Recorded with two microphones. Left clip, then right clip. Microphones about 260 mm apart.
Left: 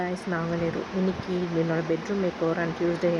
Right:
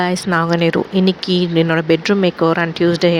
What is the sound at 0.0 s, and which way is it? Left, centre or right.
Speech, right.